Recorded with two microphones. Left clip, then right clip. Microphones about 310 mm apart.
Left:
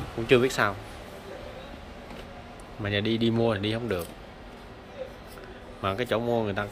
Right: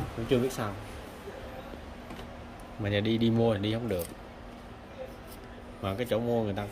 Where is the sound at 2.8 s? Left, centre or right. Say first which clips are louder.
Left 2 dB; centre.